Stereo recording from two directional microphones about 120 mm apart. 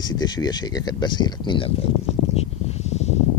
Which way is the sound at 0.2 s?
35° left (ahead or behind).